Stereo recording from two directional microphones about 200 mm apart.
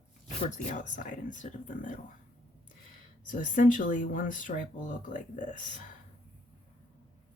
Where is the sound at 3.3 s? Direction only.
40° left (ahead or behind).